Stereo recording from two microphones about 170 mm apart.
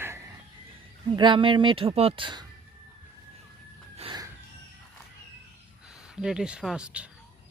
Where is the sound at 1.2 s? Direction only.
30° right (ahead or behind).